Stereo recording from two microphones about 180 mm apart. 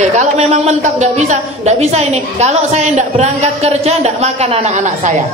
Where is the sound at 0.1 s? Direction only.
40° right (ahead or behind).